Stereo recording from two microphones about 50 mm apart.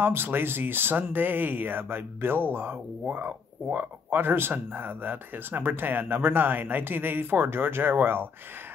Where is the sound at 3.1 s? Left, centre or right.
Right.